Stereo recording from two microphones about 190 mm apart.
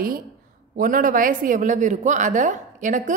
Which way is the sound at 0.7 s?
45° right (ahead or behind).